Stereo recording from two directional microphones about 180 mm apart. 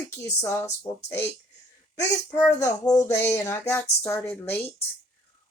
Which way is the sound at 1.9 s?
20° left (ahead or behind).